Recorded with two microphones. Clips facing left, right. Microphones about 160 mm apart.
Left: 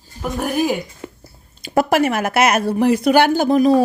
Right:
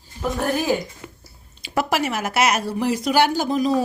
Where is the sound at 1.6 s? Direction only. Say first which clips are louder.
Left 6 dB; 50° left (ahead or behind).